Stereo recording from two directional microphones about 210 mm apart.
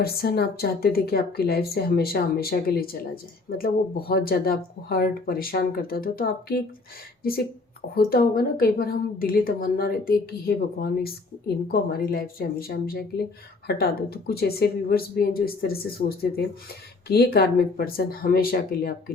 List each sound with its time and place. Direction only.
0.0 s a woman's voice: 50° left (ahead or behind)
7.9 s a woman's voice: 45° left (ahead or behind)